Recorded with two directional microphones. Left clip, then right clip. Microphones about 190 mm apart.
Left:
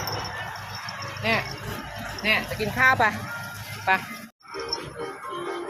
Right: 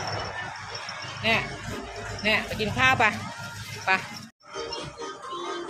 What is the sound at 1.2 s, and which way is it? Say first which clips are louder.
Speech: even; 15° left (ahead or behind).